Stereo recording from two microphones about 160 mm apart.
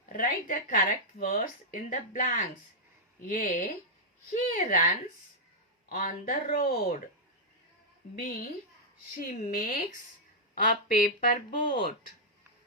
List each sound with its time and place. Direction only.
0.2 s a woman's voice: 55° left (ahead or behind)
8.2 s a woman's voice: 60° left (ahead or behind)
9.5 s a woman's voice: 65° left (ahead or behind)